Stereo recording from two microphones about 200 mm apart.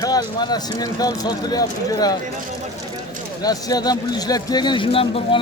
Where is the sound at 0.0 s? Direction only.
20° left (ahead or behind).